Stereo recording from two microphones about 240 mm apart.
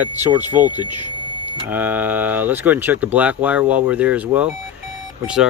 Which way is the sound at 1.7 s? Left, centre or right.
Centre.